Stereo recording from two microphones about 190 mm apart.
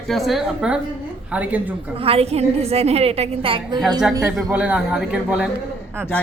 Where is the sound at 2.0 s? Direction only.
30° right (ahead or behind).